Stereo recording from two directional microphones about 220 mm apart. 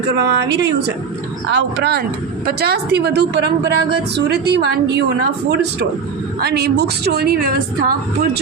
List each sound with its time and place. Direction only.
0.2 s a woman's voice: 50° right (ahead or behind)